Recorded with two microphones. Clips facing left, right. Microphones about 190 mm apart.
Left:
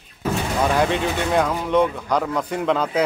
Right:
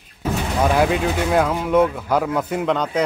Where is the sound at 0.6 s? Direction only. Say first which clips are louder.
Right 3 dB; 5° right (ahead or behind).